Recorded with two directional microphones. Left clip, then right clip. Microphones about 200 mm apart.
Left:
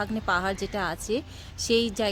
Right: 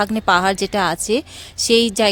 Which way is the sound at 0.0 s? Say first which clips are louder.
Right 11 dB; 45° right (ahead or behind).